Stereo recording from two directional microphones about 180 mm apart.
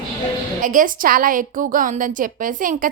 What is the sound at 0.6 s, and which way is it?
A woman's voice, 45° right (ahead or behind).